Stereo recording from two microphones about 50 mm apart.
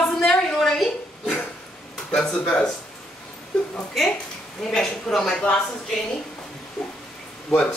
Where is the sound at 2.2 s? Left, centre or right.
Left.